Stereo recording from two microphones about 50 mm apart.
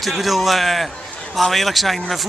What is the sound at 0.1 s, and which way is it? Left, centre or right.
A man's voice, centre.